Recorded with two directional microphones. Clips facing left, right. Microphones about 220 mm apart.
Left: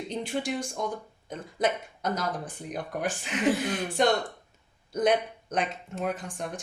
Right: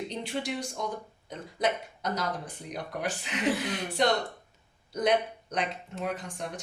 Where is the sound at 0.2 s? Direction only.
50° left (ahead or behind).